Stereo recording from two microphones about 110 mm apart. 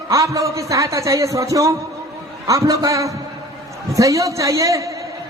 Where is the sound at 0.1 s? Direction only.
30° right (ahead or behind).